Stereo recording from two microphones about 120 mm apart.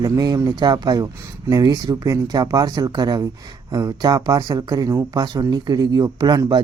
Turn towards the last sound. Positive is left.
turn(degrees=-35)  # may be behind; listen again after turning